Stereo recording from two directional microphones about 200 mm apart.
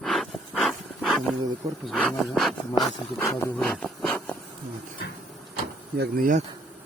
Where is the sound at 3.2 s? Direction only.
15° left (ahead or behind).